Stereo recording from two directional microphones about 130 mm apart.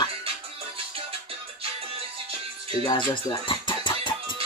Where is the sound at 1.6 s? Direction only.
50° right (ahead or behind).